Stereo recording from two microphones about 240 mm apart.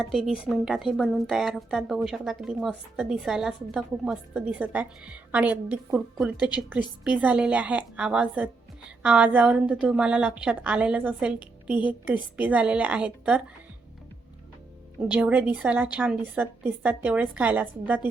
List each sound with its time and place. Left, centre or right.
0.0 s a woman's voice: centre
15.0 s a woman's voice: centre